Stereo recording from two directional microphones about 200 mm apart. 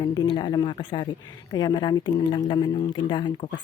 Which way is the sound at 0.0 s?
20° left (ahead or behind).